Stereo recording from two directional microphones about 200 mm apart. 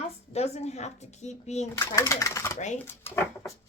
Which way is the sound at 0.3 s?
30° left (ahead or behind).